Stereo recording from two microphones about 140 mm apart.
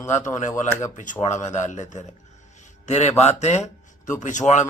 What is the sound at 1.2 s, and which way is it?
Speech, 55° left (ahead or behind).